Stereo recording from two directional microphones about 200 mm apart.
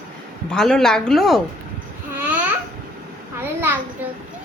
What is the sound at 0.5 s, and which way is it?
Speech, centre (ahead or behind).